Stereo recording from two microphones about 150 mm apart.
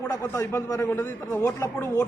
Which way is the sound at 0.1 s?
20° left (ahead or behind).